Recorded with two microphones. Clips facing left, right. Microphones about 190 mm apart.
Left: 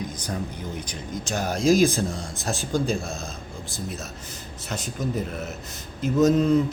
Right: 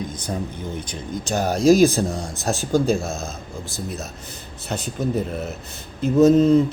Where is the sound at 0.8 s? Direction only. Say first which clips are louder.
Right 3 dB; 25° right (ahead or behind).